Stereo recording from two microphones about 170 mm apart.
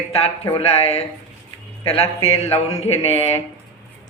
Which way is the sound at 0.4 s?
30° left (ahead or behind).